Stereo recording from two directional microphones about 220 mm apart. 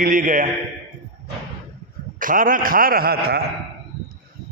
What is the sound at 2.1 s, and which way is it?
A man's voice, 40° right (ahead or behind).